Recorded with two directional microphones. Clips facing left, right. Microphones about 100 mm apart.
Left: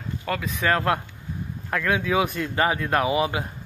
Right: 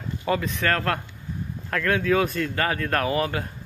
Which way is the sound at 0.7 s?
15° left (ahead or behind).